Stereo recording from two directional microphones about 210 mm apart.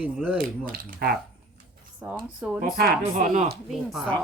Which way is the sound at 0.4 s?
45° right (ahead or behind).